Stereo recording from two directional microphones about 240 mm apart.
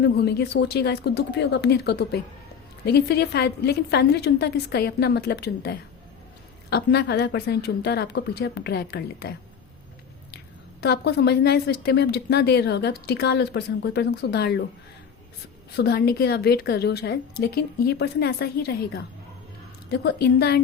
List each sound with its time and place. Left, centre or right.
0.0 s a woman's voice: left
10.3 s a woman's voice: left
15.7 s a woman's voice: left